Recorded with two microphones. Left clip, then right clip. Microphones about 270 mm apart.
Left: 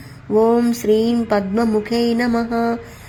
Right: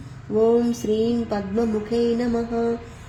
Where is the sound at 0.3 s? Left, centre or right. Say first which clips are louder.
Left 4 dB; left.